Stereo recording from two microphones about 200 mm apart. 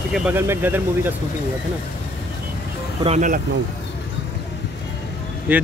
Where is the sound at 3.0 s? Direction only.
35° right (ahead or behind).